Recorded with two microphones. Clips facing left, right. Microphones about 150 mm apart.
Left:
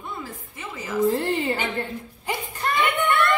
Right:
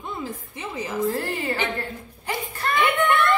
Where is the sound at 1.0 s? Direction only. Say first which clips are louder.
Left 5 dB; 25° left (ahead or behind).